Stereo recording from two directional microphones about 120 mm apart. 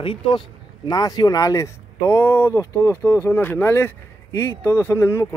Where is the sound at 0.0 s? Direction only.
45° left (ahead or behind).